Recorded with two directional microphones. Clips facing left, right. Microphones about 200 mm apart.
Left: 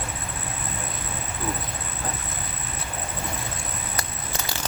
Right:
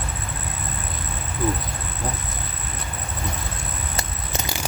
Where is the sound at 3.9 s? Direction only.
20° right (ahead or behind).